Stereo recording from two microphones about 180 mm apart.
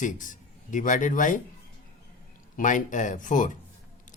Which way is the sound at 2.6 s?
45° left (ahead or behind).